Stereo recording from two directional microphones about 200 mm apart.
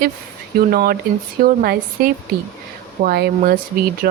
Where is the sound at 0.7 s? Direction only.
50° right (ahead or behind).